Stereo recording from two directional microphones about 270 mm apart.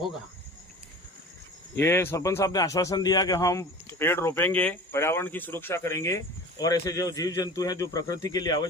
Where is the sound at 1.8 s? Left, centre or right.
Centre.